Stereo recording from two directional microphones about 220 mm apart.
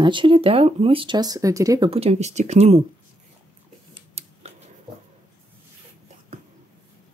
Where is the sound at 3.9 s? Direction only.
30° right (ahead or behind).